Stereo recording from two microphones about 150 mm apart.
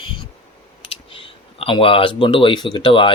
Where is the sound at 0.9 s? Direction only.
40° left (ahead or behind).